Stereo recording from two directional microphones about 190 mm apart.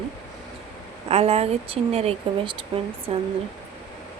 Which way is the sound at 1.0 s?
30° right (ahead or behind).